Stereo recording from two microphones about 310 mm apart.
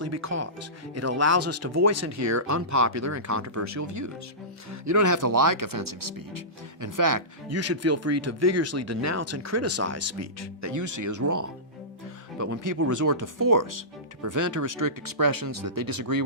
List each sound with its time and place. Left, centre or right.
0.0 s speech: right
7.5 s speech: right